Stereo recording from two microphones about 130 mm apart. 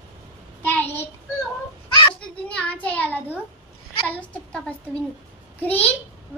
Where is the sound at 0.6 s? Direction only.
15° left (ahead or behind).